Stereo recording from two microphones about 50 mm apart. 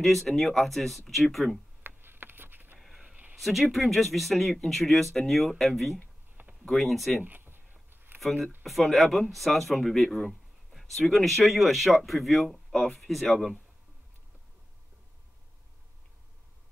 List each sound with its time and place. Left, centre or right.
0.0 s a man's voice: centre
1.8 s a sound: right
3.3 s a man's voice: centre
7.2 s a sound: right
8.4 s speech: right
8.6 s a man's voice: centre